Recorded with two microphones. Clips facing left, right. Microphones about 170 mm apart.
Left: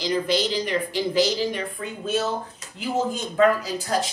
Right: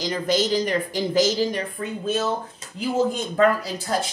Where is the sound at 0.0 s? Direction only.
45° right (ahead or behind).